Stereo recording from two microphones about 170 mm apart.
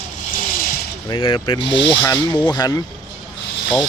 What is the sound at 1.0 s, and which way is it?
Speech, 30° left (ahead or behind).